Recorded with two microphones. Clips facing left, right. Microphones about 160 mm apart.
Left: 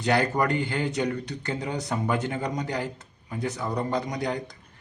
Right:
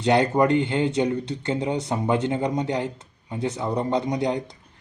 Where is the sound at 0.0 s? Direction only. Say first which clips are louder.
Right 5 dB; 25° right (ahead or behind).